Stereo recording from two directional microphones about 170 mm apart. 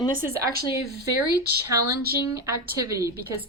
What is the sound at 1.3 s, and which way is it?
Speech, 70° right (ahead or behind).